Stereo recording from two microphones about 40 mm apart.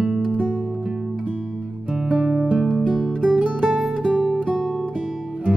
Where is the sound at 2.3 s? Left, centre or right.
Right.